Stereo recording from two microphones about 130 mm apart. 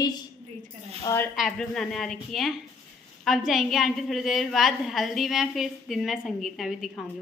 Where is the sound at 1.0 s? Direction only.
20° left (ahead or behind).